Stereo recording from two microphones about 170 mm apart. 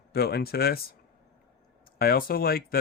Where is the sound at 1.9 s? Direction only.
65° left (ahead or behind).